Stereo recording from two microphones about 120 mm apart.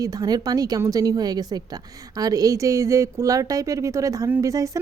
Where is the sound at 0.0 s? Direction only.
35° right (ahead or behind).